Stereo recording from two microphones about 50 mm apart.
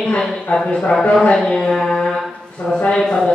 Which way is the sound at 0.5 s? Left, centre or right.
Centre.